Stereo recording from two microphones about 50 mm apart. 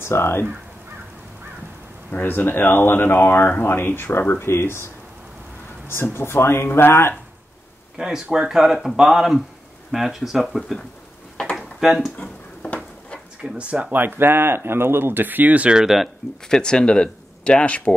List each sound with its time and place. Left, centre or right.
0.0 s speech: left
2.2 s speech: left
6.1 s speech: left
8.0 s speech: centre
11.5 s a sound: centre
13.6 s speech: right
13.9 s speech: right
15.7 s speech: centre
16.4 s speech: centre